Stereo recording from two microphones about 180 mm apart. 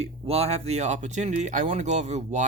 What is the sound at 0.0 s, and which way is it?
Speech, 35° right (ahead or behind).